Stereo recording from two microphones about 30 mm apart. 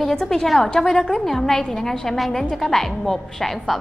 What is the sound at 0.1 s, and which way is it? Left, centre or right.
A woman's voice, centre.